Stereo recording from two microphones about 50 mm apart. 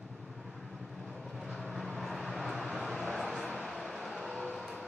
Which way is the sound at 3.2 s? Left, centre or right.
Centre.